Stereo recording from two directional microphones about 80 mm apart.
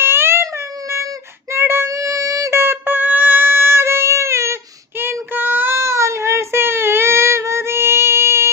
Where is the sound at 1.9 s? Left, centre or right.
Right.